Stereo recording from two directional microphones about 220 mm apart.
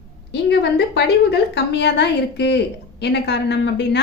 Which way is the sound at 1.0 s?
50° left (ahead or behind).